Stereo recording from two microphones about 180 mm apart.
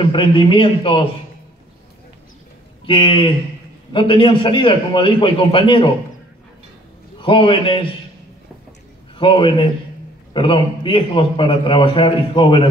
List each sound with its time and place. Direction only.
0.0 s a man's voice: 25° left (ahead or behind)
2.9 s a man's voice: 25° left (ahead or behind)
7.2 s a man's voice: 30° left (ahead or behind)
9.2 s a man's voice: 25° left (ahead or behind)